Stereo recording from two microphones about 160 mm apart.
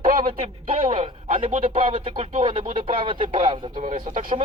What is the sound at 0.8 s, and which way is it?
Speech, 35° right (ahead or behind).